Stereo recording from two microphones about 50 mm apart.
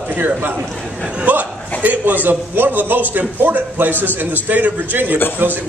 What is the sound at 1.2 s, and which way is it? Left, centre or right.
A man's voice, right.